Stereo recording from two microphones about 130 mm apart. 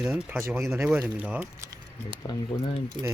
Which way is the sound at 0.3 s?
20° right (ahead or behind).